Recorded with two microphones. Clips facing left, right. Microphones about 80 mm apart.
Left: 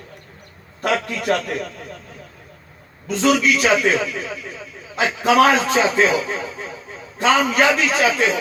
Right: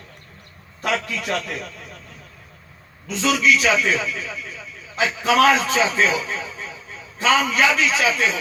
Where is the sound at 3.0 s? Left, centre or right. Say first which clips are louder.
Left 2 dB; left.